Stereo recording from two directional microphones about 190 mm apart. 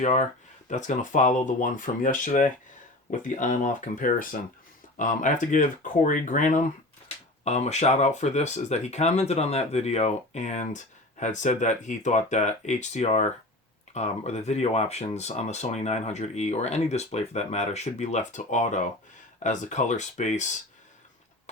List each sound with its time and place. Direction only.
0.0 s speech: 40° left (ahead or behind)